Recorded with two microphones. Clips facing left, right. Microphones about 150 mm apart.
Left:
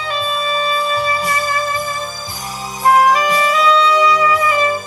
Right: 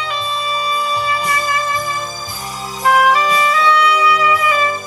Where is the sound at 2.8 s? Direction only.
30° left (ahead or behind).